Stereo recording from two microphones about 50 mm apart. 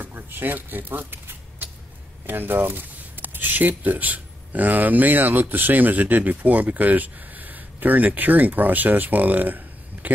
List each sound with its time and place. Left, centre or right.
0.0 s shuffling cards: right
2.2 s speech: right
10.0 s a sound: right